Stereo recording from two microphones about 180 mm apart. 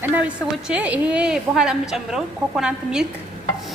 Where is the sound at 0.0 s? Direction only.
10° right (ahead or behind).